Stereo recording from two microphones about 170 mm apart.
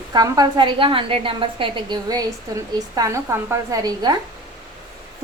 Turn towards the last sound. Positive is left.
turn(degrees=-20)  # may be behind; listen again after turning